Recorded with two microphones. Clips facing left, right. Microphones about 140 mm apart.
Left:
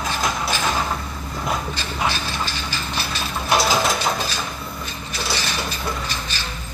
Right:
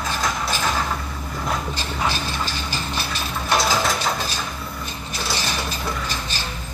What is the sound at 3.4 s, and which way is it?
Mechanisms, 10° left (ahead or behind).